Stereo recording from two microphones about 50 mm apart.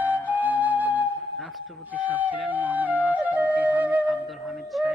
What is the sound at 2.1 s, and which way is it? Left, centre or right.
Flute, right.